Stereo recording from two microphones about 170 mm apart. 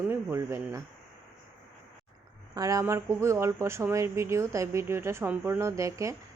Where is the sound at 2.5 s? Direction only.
20° right (ahead or behind).